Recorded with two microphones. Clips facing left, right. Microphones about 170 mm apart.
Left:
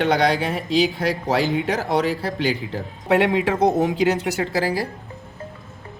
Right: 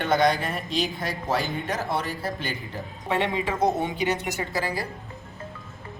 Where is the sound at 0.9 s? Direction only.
85° left.